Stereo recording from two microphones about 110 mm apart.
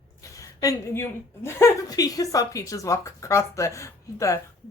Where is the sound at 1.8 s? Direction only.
35° left (ahead or behind).